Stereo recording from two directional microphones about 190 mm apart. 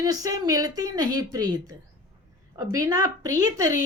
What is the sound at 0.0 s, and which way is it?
A woman's voice, 20° right (ahead or behind).